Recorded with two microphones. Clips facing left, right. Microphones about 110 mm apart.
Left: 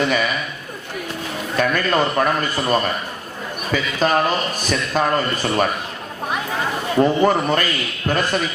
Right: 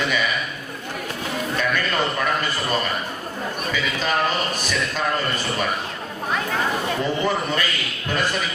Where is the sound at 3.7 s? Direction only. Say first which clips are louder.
Left 6 dB; 45° left (ahead or behind).